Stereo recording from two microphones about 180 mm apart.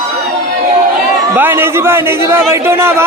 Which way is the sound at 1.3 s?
10° right (ahead or behind).